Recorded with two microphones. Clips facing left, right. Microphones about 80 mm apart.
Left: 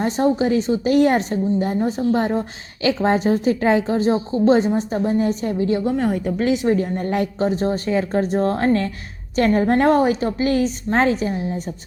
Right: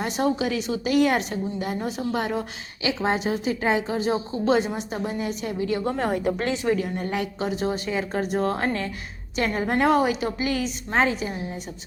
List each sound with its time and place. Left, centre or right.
0.0 s a woman's voice: left
6.0 s a woman's voice: centre
6.7 s a woman's voice: left